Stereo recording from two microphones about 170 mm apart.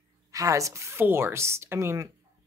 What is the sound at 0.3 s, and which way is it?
A woman's voice, 20° right (ahead or behind).